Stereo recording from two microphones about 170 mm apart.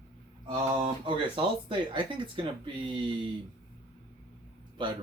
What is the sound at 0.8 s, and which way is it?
Speech, 30° right (ahead or behind).